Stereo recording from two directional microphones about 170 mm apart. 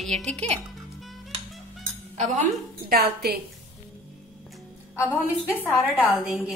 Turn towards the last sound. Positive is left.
turn(degrees=-5)  # may be behind; listen again after turning